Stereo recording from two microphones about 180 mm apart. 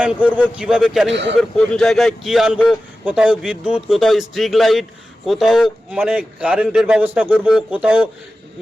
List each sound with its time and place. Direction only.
0.0 s a man's voice: 5° right (ahead or behind)
1.1 s speech: 80° right
1.4 s a man's voice: 5° left (ahead or behind)